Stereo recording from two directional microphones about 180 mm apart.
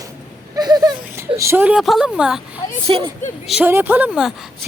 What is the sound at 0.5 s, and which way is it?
Child singing, 20° right (ahead or behind).